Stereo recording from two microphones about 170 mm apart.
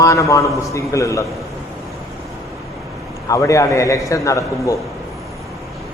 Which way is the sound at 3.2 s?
20° left (ahead or behind).